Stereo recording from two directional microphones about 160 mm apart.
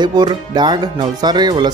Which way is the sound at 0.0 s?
25° right (ahead or behind).